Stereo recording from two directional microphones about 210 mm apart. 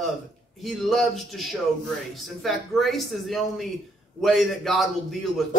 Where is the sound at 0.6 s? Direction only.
Centre (ahead or behind).